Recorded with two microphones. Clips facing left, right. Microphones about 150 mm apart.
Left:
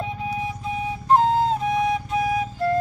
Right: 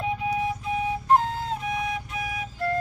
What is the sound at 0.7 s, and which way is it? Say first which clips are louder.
Flute: left 2 dB; 35° left (ahead or behind).